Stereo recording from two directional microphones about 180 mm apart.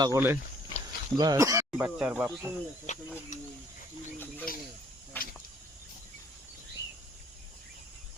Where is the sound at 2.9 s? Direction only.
40° left (ahead or behind).